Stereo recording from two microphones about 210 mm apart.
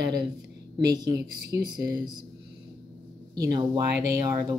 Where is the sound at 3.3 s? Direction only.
20° right (ahead or behind).